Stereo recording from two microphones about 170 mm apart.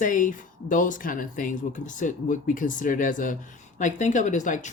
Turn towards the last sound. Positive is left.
turn(degrees=45)  # may be behind; listen again after turning